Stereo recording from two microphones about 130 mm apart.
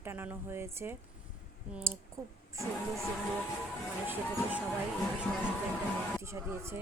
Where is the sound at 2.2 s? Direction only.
25° right (ahead or behind).